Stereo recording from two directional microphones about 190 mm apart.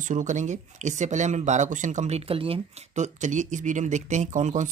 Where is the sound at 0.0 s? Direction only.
40° right (ahead or behind).